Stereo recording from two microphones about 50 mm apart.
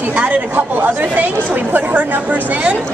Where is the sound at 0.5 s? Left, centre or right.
Right.